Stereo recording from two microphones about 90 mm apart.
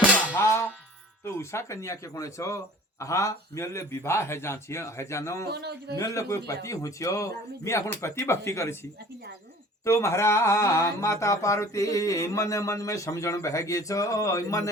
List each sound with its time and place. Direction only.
0.3 s music: 30° left (ahead or behind)
1.2 s speech: 30° left (ahead or behind)